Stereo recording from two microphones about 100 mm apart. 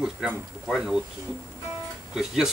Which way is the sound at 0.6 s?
5° right (ahead or behind).